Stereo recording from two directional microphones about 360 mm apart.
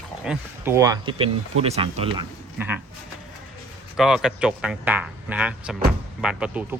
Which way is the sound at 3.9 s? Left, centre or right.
Centre.